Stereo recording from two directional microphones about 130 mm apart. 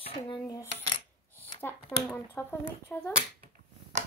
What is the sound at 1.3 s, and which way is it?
Speech, 15° left (ahead or behind).